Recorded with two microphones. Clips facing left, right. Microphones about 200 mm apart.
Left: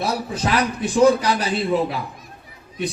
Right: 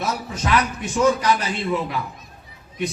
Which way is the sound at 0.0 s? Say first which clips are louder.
Left 3 dB; 35° left (ahead or behind).